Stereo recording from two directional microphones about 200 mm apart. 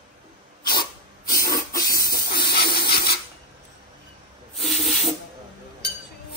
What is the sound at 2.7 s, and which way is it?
Rub, 55° left (ahead or behind).